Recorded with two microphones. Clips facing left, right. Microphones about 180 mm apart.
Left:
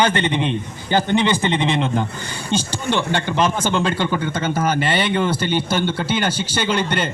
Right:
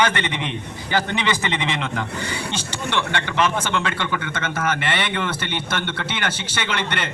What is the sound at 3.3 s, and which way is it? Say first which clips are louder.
A man's voice: left 2 dB; 30° left (ahead or behind).